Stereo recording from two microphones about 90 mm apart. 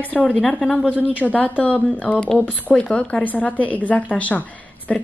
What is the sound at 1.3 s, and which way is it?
A woman's voice, 15° left (ahead or behind).